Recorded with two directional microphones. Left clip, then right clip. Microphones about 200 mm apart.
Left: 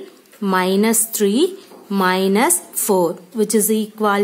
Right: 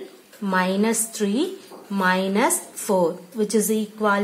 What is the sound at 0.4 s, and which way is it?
A woman's voice, 55° left (ahead or behind).